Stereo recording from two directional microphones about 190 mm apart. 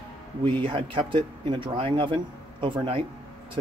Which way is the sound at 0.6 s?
25° right (ahead or behind).